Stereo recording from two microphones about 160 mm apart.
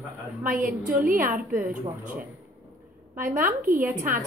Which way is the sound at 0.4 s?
60° right (ahead or behind).